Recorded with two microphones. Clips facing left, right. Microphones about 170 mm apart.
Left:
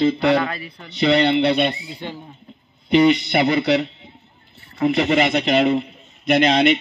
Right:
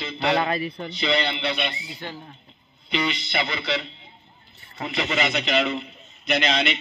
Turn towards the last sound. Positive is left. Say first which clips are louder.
# left 8 dB
turn(degrees=55)  # may be behind; listen again after turning